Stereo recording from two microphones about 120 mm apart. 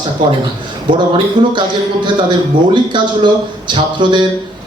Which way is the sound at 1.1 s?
40° right (ahead or behind).